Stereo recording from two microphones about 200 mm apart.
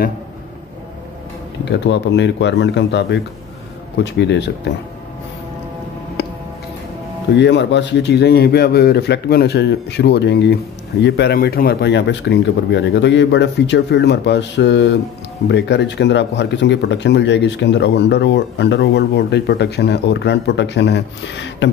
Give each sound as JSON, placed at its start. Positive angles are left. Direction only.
{"t": 1.7, "sound": "speech", "side_deg": 60}
{"t": 6.2, "sound": "tick-tock", "side_deg": 60}
{"t": 7.3, "sound": "speech", "side_deg": 60}